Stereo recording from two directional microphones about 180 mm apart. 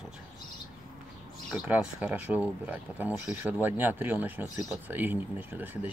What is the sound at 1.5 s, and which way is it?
Speech, 5° right (ahead or behind).